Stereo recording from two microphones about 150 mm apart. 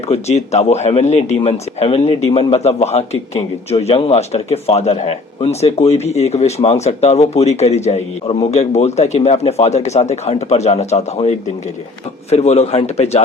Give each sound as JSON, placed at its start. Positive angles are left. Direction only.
{"t": 0.1, "sound": "speech", "side_deg": 45}